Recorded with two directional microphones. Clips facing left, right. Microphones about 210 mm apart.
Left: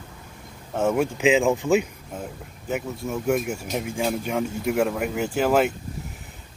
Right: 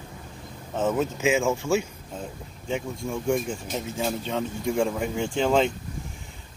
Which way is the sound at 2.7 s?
5° left (ahead or behind).